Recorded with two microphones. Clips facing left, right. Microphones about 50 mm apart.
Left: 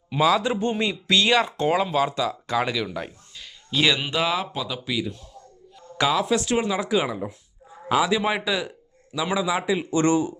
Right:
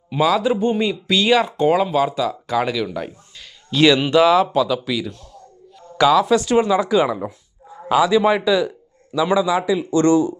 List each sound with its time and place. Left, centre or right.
0.1 s speech: centre
3.7 s a man's voice: centre
6.2 s speech: centre
9.6 s speech: centre